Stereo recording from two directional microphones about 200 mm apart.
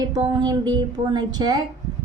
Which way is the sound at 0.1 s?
20° right (ahead or behind).